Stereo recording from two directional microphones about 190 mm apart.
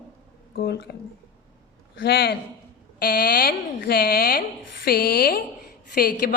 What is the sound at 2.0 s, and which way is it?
A woman's voice, 55° left (ahead or behind).